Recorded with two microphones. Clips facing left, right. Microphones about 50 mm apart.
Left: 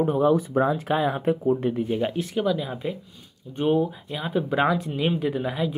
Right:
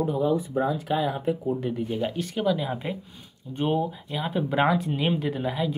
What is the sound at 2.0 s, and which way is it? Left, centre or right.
Speech, centre.